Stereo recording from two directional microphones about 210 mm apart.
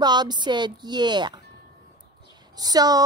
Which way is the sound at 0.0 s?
20° right (ahead or behind).